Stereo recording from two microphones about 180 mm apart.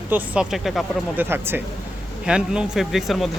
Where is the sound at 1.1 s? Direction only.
10° right (ahead or behind).